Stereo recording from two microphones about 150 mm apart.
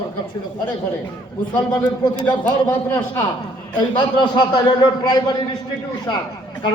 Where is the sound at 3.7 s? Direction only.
30° left (ahead or behind).